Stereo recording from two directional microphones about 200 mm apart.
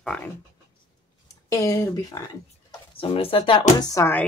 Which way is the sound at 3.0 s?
25° left (ahead or behind).